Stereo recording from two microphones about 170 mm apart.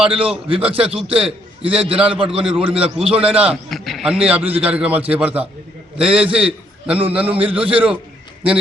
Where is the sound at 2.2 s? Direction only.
5° right (ahead or behind).